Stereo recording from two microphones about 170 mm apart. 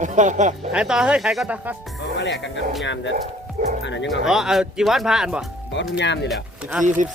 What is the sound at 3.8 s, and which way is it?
Speech, 90° left.